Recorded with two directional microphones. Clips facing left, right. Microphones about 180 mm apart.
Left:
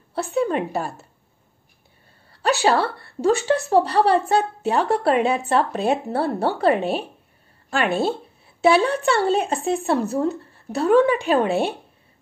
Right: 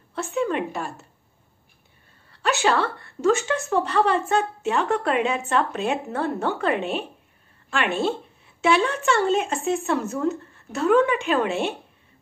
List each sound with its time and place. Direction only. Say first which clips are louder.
0.1 s a woman's voice: left 3 dB; 35° left (ahead or behind)
2.4 s a woman's voice: left 3 dB; 35° left (ahead or behind)